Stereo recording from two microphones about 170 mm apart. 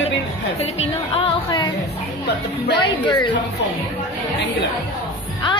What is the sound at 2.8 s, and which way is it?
Speech, 30° left (ahead or behind).